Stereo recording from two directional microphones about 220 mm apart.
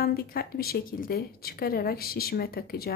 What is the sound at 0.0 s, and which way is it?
Speech, 40° left (ahead or behind).